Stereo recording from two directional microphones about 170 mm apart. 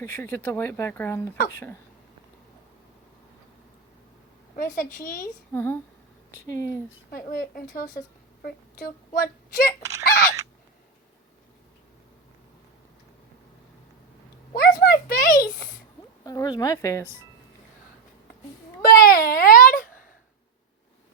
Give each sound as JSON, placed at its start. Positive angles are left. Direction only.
{"t": 0.0, "sound": "speech", "side_deg": 15}
{"t": 4.5, "sound": "a woman's voice", "side_deg": 55}
{"t": 5.5, "sound": "speech", "side_deg": 10}
{"t": 7.1, "sound": "speech", "side_deg": 60}
{"t": 14.5, "sound": "a sound", "side_deg": 60}
{"t": 16.2, "sound": "speech", "side_deg": 20}
{"t": 18.8, "sound": "a sound", "side_deg": 60}